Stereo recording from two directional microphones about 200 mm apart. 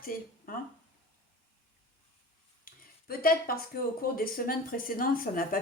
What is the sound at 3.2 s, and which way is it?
Speech, 45° left (ahead or behind).